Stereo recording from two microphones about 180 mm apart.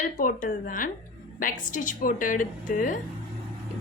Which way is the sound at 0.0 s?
50° left (ahead or behind).